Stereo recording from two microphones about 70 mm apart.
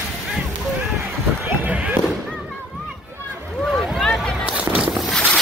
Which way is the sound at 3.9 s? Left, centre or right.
Centre.